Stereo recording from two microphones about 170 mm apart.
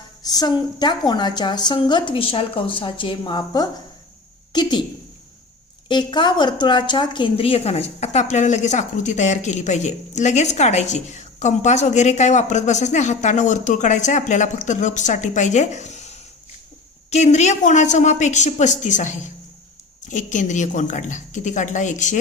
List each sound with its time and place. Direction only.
0.2 s a woman's voice: 25° left (ahead or behind)
5.9 s a woman's voice: 25° left (ahead or behind); by 22.2 s 45° left (ahead or behind)